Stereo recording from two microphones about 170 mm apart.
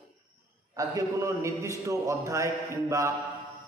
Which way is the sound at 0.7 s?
20° right (ahead or behind).